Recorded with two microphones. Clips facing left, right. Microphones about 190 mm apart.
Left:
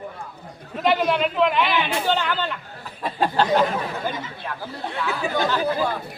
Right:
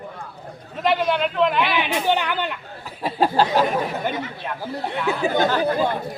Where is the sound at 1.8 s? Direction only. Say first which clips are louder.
Right 1 dB; 15° right (ahead or behind).